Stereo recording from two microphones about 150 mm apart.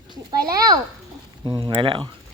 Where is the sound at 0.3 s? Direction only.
25° right (ahead or behind).